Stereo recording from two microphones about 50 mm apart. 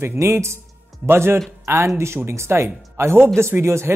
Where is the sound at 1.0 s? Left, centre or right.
Right.